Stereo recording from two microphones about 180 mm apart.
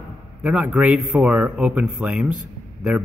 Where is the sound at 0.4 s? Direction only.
5° right (ahead or behind).